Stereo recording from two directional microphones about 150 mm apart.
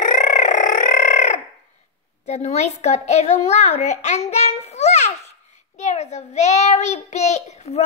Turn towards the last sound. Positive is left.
turn(degrees=50)  # may be behind; listen again after turning